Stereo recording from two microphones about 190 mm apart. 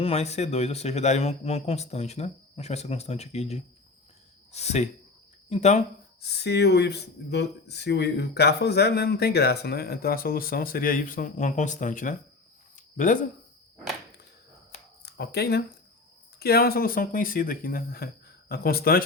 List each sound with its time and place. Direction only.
0.0 s a man's voice: 35° left (ahead or behind)
6.2 s speech: 60° left (ahead or behind); by 12.1 s 45° left (ahead or behind)
12.7 s a sound: 45° left (ahead or behind)
15.0 s speech: 60° left (ahead or behind)